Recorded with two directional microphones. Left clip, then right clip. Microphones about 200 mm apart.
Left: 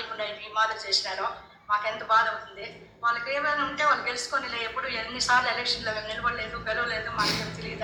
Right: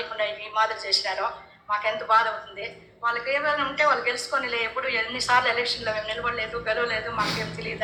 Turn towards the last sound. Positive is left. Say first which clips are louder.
# right 2 dB
turn(degrees=-20)  # may be behind; listen again after turning